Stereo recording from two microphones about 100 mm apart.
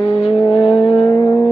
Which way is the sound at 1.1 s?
30° left (ahead or behind).